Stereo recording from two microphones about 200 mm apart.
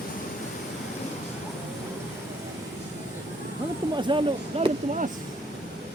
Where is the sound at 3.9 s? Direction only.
25° right (ahead or behind).